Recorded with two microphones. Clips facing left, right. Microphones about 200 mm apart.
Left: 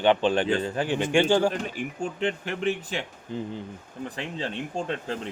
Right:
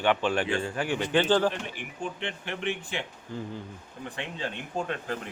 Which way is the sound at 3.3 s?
20° left (ahead or behind).